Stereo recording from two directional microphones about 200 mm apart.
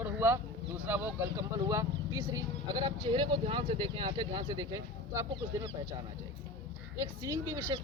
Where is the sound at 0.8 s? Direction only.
10° right (ahead or behind).